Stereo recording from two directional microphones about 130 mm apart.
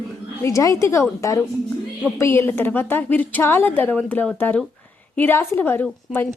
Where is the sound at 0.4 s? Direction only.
25° left (ahead or behind).